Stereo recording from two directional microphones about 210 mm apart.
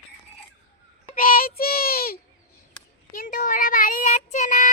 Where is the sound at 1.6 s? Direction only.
45° left (ahead or behind).